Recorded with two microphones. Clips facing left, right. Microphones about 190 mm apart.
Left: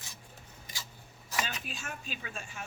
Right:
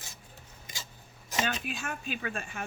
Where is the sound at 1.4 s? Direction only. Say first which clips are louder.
Right 8 dB; 60° right (ahead or behind).